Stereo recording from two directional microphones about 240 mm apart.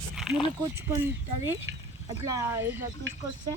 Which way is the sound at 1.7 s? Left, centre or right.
Right.